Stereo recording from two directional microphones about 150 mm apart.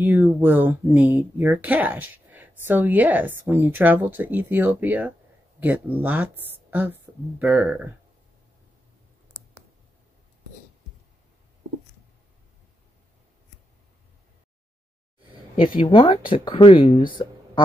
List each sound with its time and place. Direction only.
0.0 s speech: 15° right (ahead or behind)
15.8 s speech: 35° left (ahead or behind)
17.1 s a sound: 30° left (ahead or behind)